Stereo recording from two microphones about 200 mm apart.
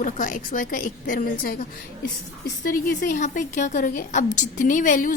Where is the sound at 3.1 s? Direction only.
40° left (ahead or behind).